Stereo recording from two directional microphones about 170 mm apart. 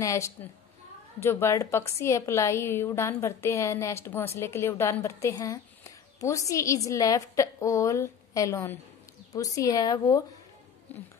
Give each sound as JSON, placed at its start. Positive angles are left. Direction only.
{"t": 0.0, "sound": "a woman's voice", "side_deg": 15}
{"t": 10.9, "sound": "a woman's voice", "side_deg": 10}